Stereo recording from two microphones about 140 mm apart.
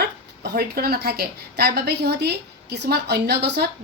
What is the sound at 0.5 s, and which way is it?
Speech, 90° right.